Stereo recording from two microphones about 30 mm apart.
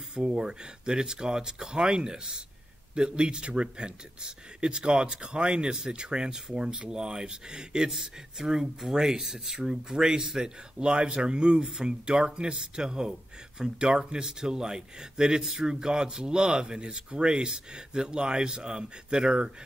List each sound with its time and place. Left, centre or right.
0.1 s speech: right
10.8 s speech: right
14.2 s speech: right